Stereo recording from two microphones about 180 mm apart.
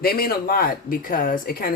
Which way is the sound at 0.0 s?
55° left (ahead or behind).